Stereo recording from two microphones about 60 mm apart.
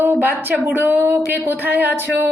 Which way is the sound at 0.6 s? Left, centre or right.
Right.